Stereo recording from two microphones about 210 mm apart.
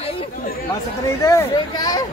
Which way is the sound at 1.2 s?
15° left (ahead or behind).